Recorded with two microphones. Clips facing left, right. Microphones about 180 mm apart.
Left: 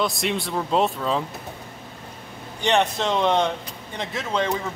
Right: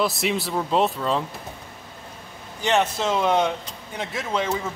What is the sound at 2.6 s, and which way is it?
A man's voice, centre (ahead or behind).